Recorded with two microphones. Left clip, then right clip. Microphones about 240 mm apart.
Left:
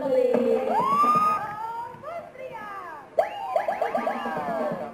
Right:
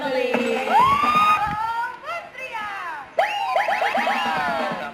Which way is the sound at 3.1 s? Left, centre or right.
Centre.